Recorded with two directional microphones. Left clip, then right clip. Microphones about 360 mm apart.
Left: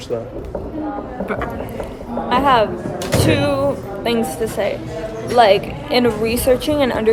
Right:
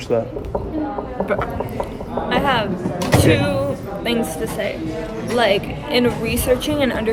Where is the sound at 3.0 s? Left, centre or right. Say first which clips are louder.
Right 2 dB; centre.